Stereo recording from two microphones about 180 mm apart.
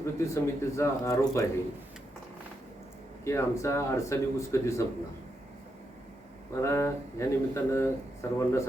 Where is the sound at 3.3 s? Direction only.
15° left (ahead or behind).